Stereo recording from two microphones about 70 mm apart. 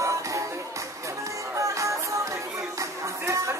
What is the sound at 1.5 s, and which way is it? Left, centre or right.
Music, right.